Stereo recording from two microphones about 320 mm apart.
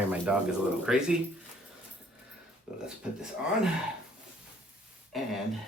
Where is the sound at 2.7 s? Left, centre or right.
Centre.